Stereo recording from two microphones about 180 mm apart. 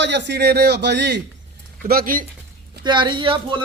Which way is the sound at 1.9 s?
55° right (ahead or behind).